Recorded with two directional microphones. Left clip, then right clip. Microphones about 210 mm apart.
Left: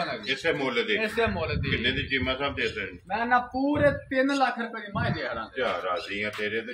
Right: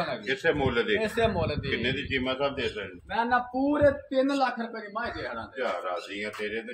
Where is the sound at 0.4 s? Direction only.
40° right (ahead or behind).